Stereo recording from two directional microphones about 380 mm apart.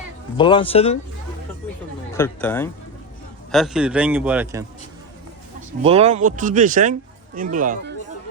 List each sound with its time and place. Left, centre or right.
0.3 s speech: centre
2.1 s a man's voice: centre
5.8 s speech: centre